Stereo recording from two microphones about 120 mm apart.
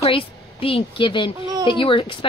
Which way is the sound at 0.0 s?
50° left (ahead or behind).